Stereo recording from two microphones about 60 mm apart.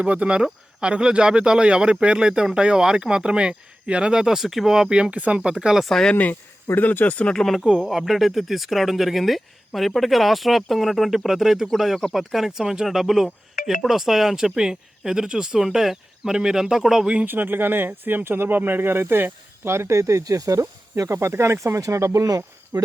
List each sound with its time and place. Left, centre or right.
0.0 s speech: right
4.2 s speech: centre
5.7 s speech: centre
6.7 s speech: left
7.3 s speech: centre
17.2 s speech: right
21.8 s speech: right